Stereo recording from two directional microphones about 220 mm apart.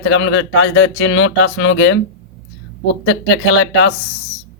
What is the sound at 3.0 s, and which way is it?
Speech, 55° left (ahead or behind).